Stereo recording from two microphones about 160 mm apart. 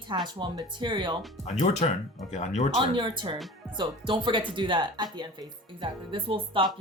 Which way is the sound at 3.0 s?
30° right (ahead or behind).